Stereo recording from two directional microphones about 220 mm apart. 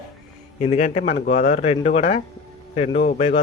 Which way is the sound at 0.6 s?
30° left (ahead or behind).